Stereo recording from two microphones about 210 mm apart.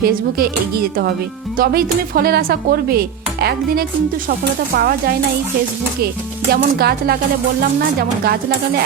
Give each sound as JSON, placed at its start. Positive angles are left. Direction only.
{"t": 1.5, "sound": "speech", "side_deg": -45}
{"t": 6.5, "sound": "speech", "side_deg": -45}